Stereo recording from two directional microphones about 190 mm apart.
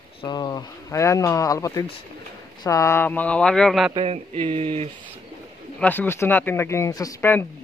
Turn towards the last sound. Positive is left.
turn(degrees=15)  # may be behind; listen again after turning